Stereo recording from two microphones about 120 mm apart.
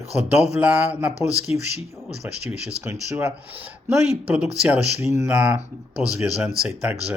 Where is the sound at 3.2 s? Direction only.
20° right (ahead or behind).